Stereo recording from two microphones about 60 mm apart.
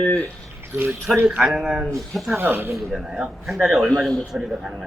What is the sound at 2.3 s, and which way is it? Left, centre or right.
Speech, right.